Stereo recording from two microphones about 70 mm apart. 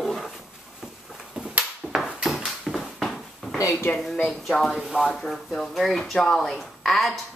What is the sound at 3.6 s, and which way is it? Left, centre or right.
Speech, left.